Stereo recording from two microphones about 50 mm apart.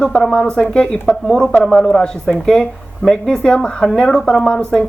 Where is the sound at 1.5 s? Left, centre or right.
Left.